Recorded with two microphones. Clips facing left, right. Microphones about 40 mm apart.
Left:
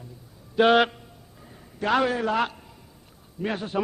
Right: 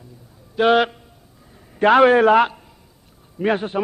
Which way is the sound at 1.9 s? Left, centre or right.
Right.